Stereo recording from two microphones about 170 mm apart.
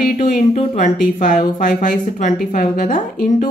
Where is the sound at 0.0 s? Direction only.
50° left (ahead or behind).